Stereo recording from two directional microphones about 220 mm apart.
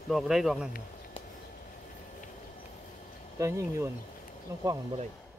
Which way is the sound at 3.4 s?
15° right (ahead or behind).